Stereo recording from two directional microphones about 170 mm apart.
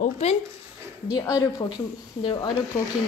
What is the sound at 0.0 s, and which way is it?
Speech, 40° left (ahead or behind).